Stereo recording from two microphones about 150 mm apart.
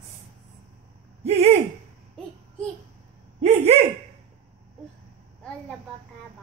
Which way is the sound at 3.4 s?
45° right (ahead or behind).